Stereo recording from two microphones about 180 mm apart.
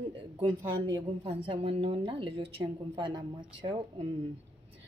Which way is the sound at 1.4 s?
30° right (ahead or behind).